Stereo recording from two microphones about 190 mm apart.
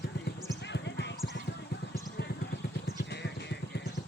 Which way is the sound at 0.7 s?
65° left (ahead or behind).